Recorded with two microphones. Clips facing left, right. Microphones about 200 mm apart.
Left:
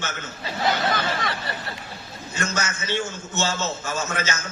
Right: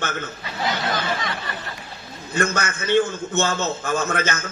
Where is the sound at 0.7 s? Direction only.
55° left (ahead or behind).